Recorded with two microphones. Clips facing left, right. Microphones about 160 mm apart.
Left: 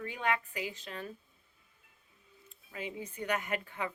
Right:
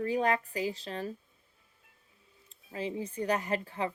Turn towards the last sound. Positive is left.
turn(degrees=-30)  # may be behind; listen again after turning